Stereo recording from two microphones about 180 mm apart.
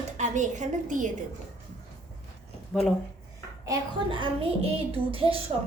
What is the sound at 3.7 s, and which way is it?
Speech, 25° right (ahead or behind).